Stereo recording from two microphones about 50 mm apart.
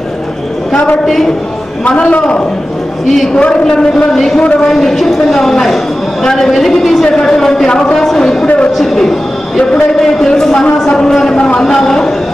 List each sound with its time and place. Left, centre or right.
1.0 s a man's voice: centre
1.9 s a man's voice: left
4.6 s a man's voice: centre